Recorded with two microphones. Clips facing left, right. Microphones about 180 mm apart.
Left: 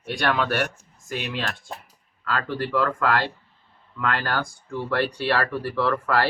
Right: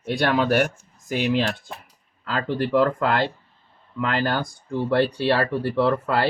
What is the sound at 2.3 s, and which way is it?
Speech, 20° right (ahead or behind).